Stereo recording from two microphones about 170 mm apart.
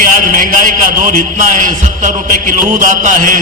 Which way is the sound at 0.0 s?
50° right (ahead or behind).